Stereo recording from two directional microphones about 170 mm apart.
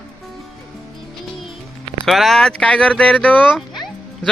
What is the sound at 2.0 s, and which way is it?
Speech, centre (ahead or behind).